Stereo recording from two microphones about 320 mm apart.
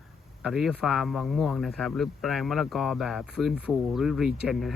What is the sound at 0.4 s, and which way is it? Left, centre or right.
Speech, centre.